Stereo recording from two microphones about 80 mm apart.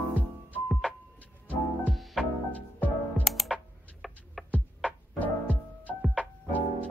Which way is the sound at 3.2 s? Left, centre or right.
Centre.